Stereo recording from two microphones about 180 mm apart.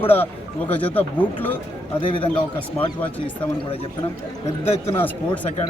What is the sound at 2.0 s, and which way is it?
Speech, 30° left (ahead or behind).